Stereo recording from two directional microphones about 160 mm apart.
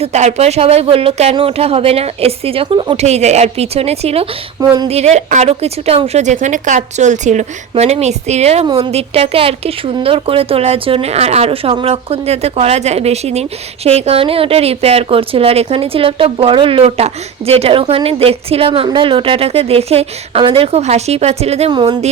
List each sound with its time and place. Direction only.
0.0 s a woman's voice: 45° right (ahead or behind)
4.6 s speech: 25° right (ahead or behind)
4.9 s a woman's voice: 40° right (ahead or behind)